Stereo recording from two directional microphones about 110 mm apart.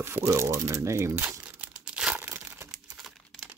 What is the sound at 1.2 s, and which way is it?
Crumpling, 10° right (ahead or behind).